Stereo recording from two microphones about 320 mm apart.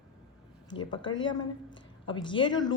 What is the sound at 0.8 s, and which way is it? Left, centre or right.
A woman's voice, centre.